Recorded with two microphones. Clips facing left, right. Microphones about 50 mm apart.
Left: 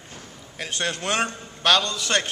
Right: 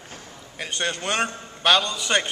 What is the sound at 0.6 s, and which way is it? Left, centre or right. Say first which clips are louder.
A man's voice: even; centre.